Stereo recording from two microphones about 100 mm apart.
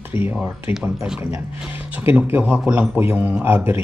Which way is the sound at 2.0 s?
20° right (ahead or behind).